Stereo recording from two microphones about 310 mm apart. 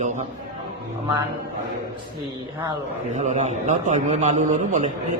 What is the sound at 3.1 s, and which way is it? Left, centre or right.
A man's voice, right.